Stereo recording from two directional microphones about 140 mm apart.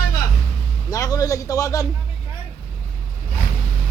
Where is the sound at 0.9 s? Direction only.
25° left (ahead or behind).